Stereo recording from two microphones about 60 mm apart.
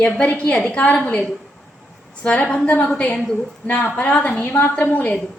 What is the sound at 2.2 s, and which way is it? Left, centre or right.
A woman's voice, centre.